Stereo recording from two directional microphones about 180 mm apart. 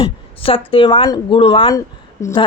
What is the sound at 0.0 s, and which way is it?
Speech, 30° left (ahead or behind).